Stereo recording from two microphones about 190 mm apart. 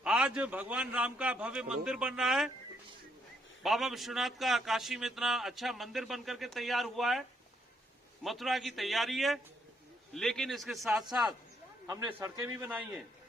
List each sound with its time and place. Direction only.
0.0 s a man's voice: 5° right (ahead or behind)
3.6 s a man's voice: centre (ahead or behind)
11.9 s a man's voice: 15° right (ahead or behind)